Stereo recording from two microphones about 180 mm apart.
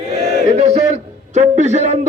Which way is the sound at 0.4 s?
35° right (ahead or behind).